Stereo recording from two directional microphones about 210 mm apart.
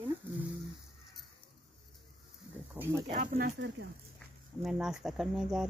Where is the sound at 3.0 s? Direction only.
35° right (ahead or behind).